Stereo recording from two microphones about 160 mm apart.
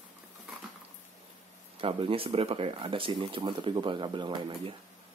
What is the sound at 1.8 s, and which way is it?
Speech, 35° right (ahead or behind).